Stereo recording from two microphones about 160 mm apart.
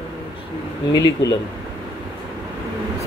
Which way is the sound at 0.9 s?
25° left (ahead or behind).